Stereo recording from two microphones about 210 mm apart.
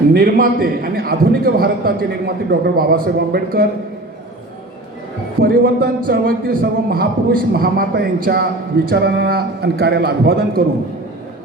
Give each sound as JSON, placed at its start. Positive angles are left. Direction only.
{"t": 0.1, "sound": "speech", "side_deg": -40}
{"t": 5.4, "sound": "speech", "side_deg": -45}